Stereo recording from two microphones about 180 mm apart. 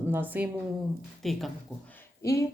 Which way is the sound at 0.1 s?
10° right (ahead or behind).